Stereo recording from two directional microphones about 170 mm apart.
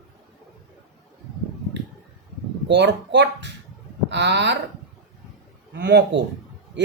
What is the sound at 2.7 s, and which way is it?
Speech, 90° right.